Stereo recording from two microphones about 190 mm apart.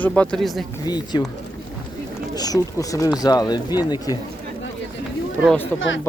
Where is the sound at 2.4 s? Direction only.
20° left (ahead or behind).